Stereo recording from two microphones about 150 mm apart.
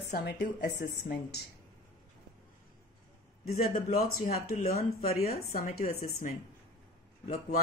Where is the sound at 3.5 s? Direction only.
85° left.